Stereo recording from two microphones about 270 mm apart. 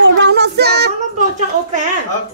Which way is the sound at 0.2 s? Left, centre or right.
Right.